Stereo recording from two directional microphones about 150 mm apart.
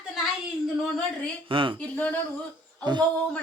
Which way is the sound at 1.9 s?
10° left (ahead or behind).